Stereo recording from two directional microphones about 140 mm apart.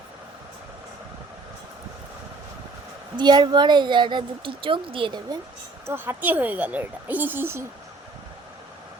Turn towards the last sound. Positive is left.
turn(degrees=-15)  # may be behind; listen again after turning